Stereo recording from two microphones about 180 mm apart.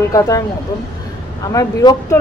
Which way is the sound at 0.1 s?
20° left (ahead or behind).